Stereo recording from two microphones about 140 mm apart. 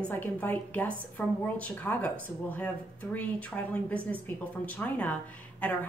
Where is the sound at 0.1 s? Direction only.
10° left (ahead or behind).